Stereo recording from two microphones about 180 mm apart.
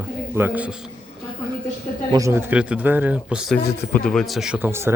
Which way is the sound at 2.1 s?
15° right (ahead or behind).